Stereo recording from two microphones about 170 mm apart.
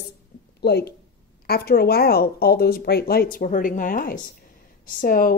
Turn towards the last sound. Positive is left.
turn(degrees=60)  # may be behind; listen again after turning